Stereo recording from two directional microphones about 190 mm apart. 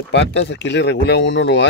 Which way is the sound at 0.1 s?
70° left (ahead or behind).